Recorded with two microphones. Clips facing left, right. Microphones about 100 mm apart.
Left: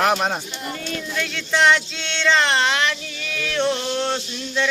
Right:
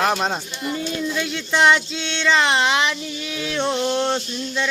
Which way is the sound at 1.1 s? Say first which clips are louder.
Left 3 dB; 10° right (ahead or behind).